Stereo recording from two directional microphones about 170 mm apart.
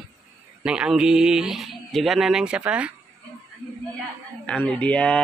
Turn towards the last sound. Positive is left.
turn(degrees=5)  # may be behind; listen again after turning